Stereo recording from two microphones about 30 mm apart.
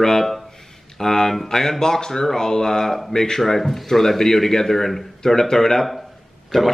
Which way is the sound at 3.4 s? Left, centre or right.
Centre.